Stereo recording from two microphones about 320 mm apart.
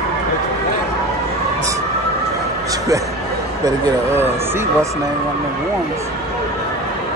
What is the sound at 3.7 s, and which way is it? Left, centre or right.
Speech, centre.